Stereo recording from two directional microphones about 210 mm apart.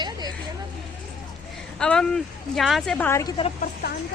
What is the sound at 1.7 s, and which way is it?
Speech, 5° left (ahead or behind).